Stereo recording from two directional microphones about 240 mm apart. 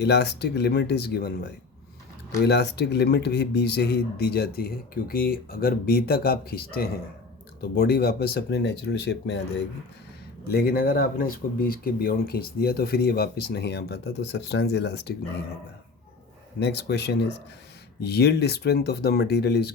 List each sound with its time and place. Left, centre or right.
0.0 s speech: left
16.6 s speech: left